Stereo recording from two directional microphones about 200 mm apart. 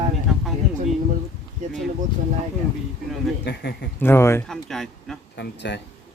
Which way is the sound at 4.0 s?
10° left (ahead or behind).